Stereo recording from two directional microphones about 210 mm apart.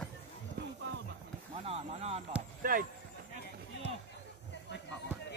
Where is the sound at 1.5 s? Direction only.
30° right (ahead or behind).